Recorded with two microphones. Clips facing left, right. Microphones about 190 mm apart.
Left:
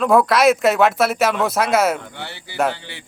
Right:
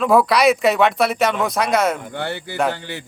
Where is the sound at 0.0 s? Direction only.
Centre (ahead or behind).